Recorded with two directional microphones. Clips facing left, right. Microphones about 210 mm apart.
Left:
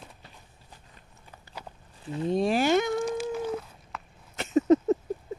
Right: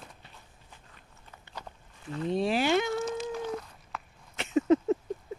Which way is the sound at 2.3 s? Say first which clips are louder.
Left 3 dB; 45° left (ahead or behind).